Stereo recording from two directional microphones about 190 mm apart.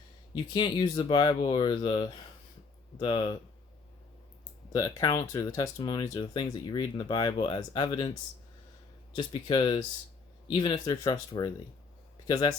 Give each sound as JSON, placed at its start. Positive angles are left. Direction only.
{"t": 0.5, "sound": "speech", "side_deg": 25}
{"t": 4.7, "sound": "speech", "side_deg": 20}
{"t": 9.1, "sound": "speech", "side_deg": 25}